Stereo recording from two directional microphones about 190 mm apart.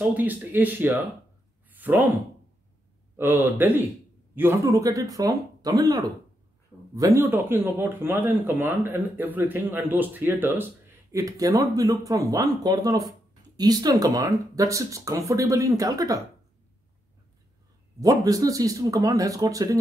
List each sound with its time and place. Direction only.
0.0 s speech: 10° right (ahead or behind)
3.2 s speech: 10° right (ahead or behind)
18.0 s speech: 20° right (ahead or behind)